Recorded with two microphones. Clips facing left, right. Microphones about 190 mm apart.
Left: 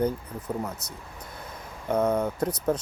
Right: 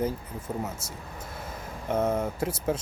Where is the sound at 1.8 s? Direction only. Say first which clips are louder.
Left 2 dB; 5° right (ahead or behind).